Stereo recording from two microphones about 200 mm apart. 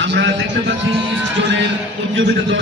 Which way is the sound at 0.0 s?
65° right (ahead or behind).